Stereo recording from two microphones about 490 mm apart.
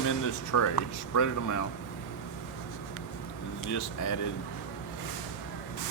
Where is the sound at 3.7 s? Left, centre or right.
Left.